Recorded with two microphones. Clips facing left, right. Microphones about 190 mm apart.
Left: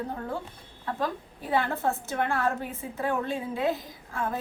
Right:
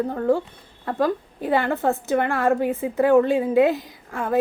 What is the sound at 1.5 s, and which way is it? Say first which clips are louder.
A woman's voice: right 6 dB; 70° right (ahead or behind).